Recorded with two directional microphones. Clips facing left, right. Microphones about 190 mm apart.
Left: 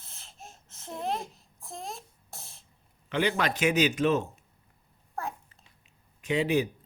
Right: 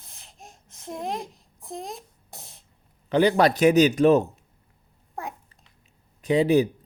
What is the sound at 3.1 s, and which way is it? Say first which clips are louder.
Speech: right 9 dB; 35° right (ahead or behind).